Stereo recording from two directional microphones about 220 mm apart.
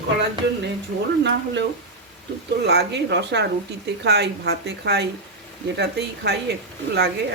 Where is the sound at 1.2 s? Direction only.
55° right (ahead or behind).